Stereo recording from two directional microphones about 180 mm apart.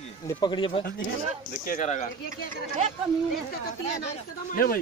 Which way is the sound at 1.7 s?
40° left (ahead or behind).